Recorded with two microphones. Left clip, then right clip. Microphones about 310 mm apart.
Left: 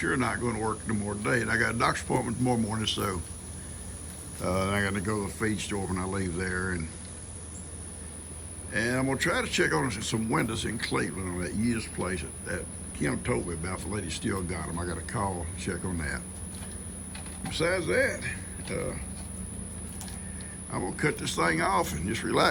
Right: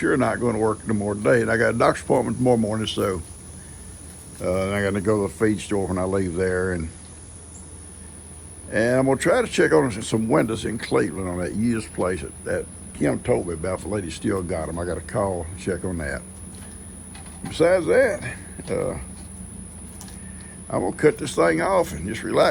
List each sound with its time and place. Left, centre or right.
0.0 s speech: centre
4.4 s speech: centre
8.7 s speech: centre
17.5 s speech: centre
20.7 s speech: centre